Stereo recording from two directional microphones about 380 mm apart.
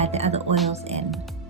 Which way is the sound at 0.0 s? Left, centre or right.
Centre.